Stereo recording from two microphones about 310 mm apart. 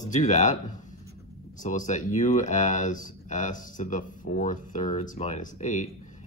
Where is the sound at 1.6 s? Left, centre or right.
Left.